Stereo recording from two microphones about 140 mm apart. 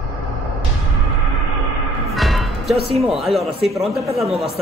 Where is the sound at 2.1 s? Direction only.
Centre (ahead or behind).